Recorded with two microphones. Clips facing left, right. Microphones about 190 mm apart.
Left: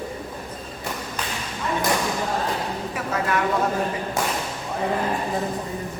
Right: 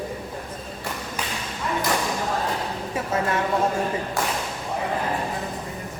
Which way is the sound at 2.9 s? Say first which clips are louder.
Right 1 dB; 25° right (ahead or behind).